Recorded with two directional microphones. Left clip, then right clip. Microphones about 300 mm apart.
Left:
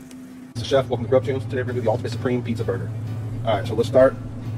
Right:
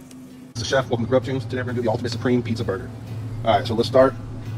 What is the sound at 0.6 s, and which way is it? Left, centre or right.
Speech, right.